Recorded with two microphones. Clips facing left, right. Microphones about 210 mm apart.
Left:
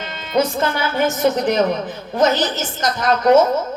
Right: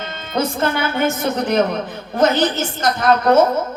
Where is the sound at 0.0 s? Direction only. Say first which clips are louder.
Left 2 dB; 55° right (ahead or behind).